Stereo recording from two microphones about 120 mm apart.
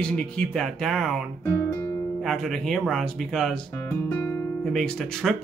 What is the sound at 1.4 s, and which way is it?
Guitar, 20° left (ahead or behind).